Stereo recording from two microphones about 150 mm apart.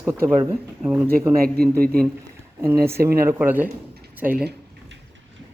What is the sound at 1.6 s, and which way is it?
Speech, 90° right.